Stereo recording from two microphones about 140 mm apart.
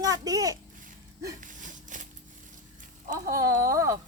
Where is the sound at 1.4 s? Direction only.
65° right (ahead or behind).